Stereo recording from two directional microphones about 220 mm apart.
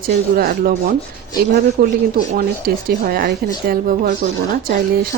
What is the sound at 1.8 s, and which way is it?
A woman's voice, 45° right (ahead or behind).